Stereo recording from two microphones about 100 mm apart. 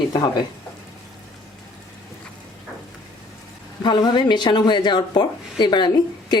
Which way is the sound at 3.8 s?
50° left (ahead or behind).